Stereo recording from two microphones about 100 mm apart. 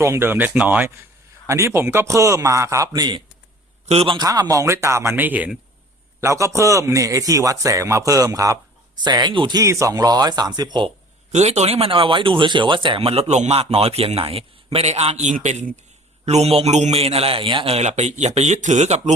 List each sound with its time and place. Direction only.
0.0 s speech: 25° right (ahead or behind)
1.5 s a man's voice: 30° right (ahead or behind); by 3.2 s 45° right (ahead or behind)
3.8 s speech: 75° right (ahead or behind)
4.2 s speech: 40° right (ahead or behind); by 5.5 s 15° right (ahead or behind)
6.1 s a man's voice: 30° right (ahead or behind)
9.0 s speech: 50° right (ahead or behind)
9.6 s a man's voice: 30° right (ahead or behind)
11.4 s speech: 90° right
16.2 s a man's voice: 90° right